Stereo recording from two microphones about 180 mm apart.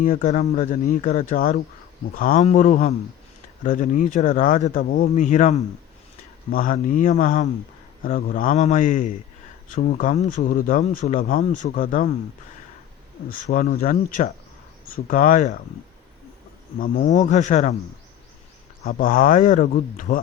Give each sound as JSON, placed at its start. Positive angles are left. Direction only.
{"t": 0.0, "sound": "speech", "side_deg": 45}
{"t": 13.3, "sound": "speech", "side_deg": 45}
{"t": 16.7, "sound": "speech", "side_deg": 45}
{"t": 18.9, "sound": "speech", "side_deg": 50}